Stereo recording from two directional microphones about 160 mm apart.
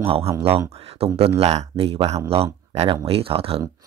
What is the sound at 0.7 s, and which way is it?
Speech, 40° right (ahead or behind).